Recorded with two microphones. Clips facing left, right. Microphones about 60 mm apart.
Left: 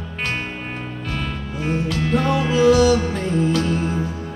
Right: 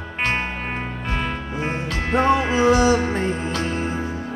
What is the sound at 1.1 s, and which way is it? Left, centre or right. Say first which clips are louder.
Music: right 2 dB; right.